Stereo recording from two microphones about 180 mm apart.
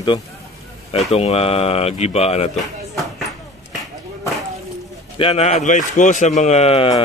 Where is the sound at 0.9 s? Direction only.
35° left (ahead or behind).